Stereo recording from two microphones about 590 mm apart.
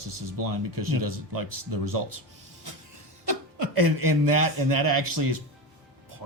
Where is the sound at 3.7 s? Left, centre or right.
Right.